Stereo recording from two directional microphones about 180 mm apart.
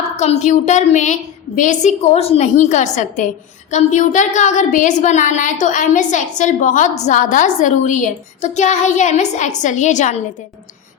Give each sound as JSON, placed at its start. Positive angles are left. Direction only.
{"t": 0.2, "sound": "a woman's voice", "side_deg": 40}